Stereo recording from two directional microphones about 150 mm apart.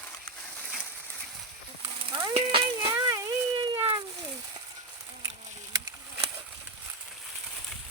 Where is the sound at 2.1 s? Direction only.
25° right (ahead or behind).